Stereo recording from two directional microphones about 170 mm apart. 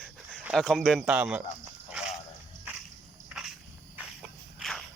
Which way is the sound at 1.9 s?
5° right (ahead or behind).